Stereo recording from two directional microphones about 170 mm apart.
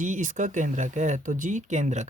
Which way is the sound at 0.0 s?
50° right (ahead or behind).